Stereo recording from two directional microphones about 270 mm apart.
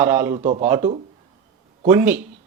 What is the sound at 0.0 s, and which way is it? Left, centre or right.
Speech, centre.